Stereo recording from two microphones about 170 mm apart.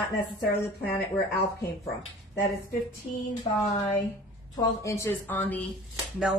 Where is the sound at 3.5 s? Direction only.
30° left (ahead or behind).